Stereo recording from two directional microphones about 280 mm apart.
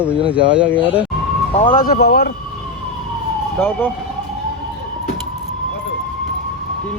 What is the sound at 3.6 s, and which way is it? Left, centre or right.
Speech, centre.